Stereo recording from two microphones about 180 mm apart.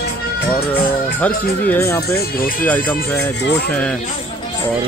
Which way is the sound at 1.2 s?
10° left (ahead or behind).